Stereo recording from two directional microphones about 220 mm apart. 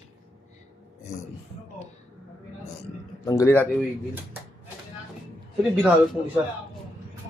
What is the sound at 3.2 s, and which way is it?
Speech, 15° left (ahead or behind).